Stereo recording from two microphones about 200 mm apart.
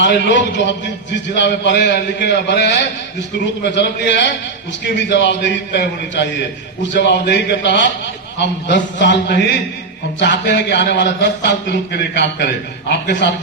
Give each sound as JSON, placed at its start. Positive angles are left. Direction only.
{"t": 0.0, "sound": "a man's voice", "side_deg": 65}